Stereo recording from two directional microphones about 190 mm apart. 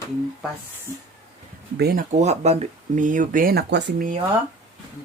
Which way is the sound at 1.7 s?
55° right (ahead or behind).